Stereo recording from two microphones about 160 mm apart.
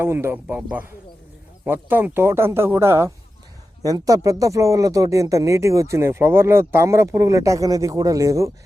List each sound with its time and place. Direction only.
0.0 s speech: 15° right (ahead or behind)